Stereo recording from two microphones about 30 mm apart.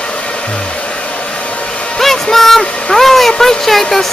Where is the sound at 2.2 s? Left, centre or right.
Centre.